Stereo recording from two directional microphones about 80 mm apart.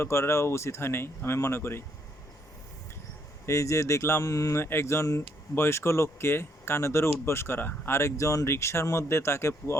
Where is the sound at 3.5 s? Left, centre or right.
Left.